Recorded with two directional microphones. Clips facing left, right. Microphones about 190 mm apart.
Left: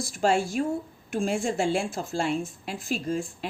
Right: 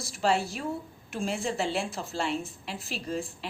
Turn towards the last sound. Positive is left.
turn(degrees=45)  # may be behind; listen again after turning